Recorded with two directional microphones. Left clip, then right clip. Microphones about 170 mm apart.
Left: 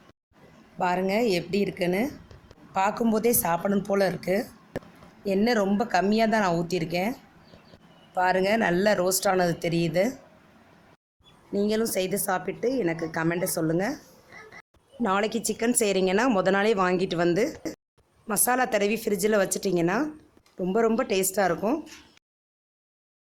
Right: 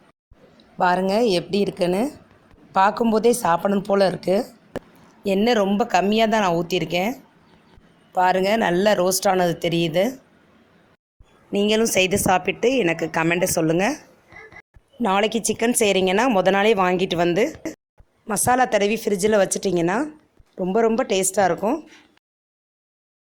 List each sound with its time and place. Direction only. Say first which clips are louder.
0.8 s a woman's voice: right 6 dB; 25° right (ahead or behind)
11.5 s a woman's voice: right 7 dB; 20° right (ahead or behind)
15.0 s a woman's voice: right 6 dB; 15° right (ahead or behind)
18.3 s a woman's voice: right 6 dB; 25° right (ahead or behind)